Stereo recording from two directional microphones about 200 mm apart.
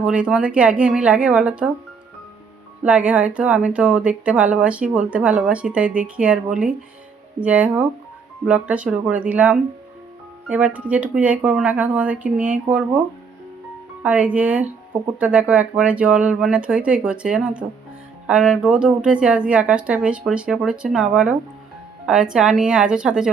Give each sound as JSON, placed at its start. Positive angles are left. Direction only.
{"t": 0.0, "sound": "speech", "side_deg": -5}
{"t": 2.8, "sound": "speech", "side_deg": -5}
{"t": 14.0, "sound": "speech", "side_deg": -5}